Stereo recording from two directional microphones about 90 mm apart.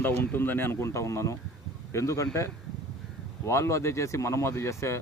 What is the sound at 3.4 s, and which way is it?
Speech, 30° left (ahead or behind).